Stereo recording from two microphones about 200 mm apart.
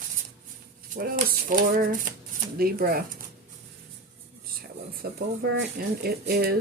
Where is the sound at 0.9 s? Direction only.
45° right (ahead or behind).